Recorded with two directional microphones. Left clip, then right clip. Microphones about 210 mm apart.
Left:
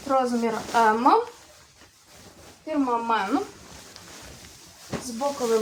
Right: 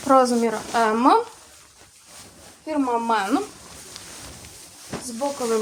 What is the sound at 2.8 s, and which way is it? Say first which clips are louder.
Speech: right 3 dB; 45° right (ahead or behind).